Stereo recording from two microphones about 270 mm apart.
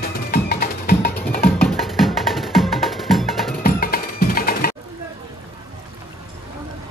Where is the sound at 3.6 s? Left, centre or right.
Left.